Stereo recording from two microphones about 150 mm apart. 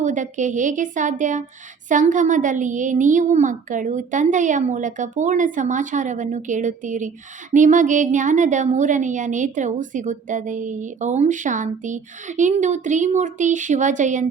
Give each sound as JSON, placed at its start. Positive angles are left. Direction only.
{"t": 0.0, "sound": "a woman's voice", "side_deg": -55}